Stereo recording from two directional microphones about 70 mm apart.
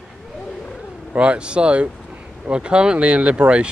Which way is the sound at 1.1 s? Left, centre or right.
Centre.